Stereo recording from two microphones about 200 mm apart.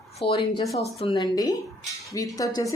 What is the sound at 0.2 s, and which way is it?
A woman's voice, 25° left (ahead or behind).